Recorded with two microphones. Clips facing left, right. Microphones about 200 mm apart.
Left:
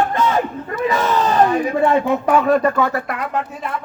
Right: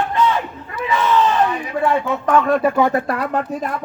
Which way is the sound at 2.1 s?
10° left (ahead or behind).